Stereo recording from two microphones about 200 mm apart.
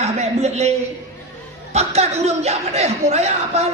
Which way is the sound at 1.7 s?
30° right (ahead or behind).